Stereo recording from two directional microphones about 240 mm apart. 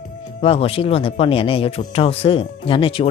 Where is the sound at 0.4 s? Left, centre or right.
Left.